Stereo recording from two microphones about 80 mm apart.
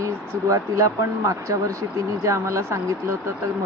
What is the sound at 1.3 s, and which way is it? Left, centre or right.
Speech, right.